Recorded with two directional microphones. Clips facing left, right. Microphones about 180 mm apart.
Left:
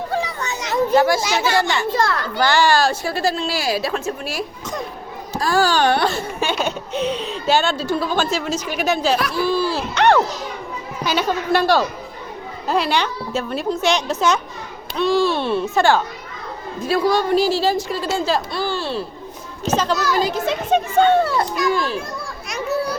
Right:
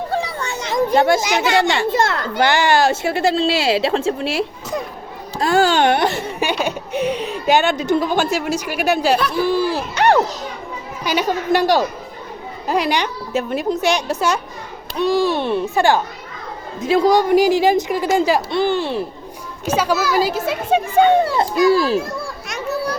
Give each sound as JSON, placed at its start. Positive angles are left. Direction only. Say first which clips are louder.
{"t": 0.3, "sound": "children playing", "louder": "right 1 dB", "side_deg": -30}
{"t": 0.9, "sound": "a child's voice", "louder": "right 1 dB", "side_deg": -25}
{"t": 21.6, "sound": "a child's voice", "louder": "right 11 dB", "side_deg": -35}
{"t": 22.4, "sound": "children playing", "louder": "left 2 dB", "side_deg": 0}